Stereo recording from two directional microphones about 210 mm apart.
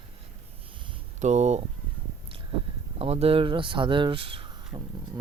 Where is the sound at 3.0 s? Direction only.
30° right (ahead or behind).